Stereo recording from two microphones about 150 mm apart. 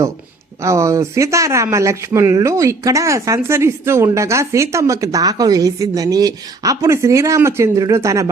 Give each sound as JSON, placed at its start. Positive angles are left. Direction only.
{"t": 0.6, "sound": "speech", "side_deg": -20}